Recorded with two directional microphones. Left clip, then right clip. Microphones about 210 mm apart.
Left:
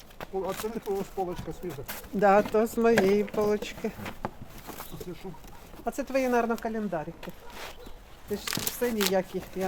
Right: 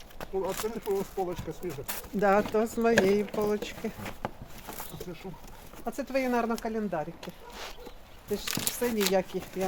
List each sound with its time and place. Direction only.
0.3 s speech: centre (ahead or behind)
2.2 s speech: 30° left (ahead or behind); by 3.9 s 45° left (ahead or behind)
4.2 s a sound: 5° left (ahead or behind)
5.8 s speech: 45° left (ahead or behind); by 9.4 s 25° left (ahead or behind)